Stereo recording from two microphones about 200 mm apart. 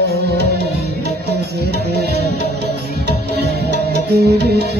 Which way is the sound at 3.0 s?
55° right (ahead or behind).